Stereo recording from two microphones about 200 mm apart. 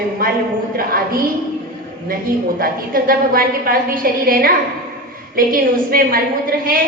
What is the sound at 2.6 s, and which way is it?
A woman's voice, 45° right (ahead or behind).